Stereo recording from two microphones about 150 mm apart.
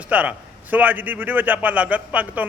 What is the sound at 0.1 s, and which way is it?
A man's voice, 10° right (ahead or behind).